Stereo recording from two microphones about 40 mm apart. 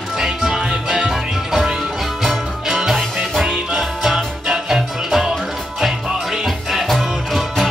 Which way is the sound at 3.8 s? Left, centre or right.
Centre.